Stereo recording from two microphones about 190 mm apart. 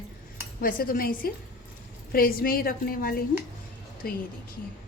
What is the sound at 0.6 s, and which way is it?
A woman's voice, 50° left (ahead or behind).